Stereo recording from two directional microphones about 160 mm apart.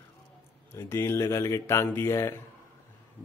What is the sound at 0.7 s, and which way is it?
Speech, 15° left (ahead or behind).